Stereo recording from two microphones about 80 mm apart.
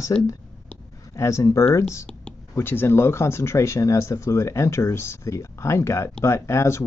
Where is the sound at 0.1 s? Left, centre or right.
Centre.